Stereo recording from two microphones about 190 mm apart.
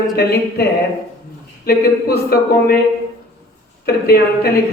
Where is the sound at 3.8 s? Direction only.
55° left (ahead or behind).